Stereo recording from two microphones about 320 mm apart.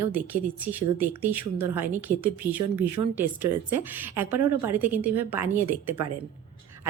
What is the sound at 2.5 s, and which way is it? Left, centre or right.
Speech, right.